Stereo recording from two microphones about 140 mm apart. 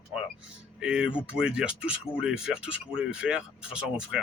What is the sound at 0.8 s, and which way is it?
Speech, 5° right (ahead or behind).